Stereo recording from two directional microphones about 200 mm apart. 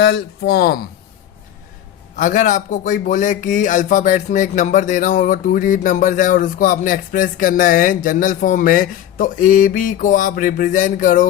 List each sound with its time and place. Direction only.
0.0 s speech: 55° left (ahead or behind)
2.1 s speech: 40° left (ahead or behind)